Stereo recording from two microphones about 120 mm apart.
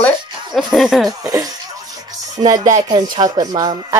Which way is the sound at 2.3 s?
35° right (ahead or behind).